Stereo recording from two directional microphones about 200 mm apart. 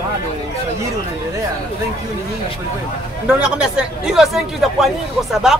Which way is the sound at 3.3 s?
5° right (ahead or behind).